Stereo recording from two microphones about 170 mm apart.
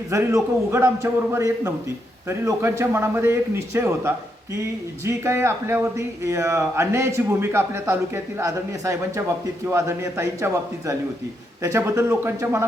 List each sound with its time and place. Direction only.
0.1 s speech: 15° right (ahead or behind)